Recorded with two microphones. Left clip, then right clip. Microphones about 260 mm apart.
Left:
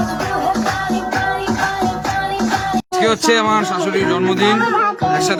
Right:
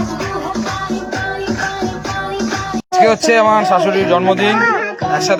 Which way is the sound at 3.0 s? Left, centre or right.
Centre.